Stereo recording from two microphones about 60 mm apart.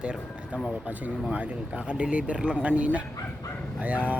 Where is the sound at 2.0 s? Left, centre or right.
Right.